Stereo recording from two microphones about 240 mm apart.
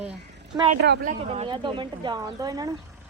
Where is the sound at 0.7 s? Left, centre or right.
Right; by 2.6 s centre.